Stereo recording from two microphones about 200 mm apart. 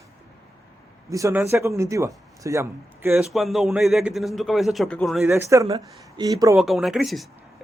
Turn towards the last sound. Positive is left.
turn(degrees=0)  # may be behind; listen again after turning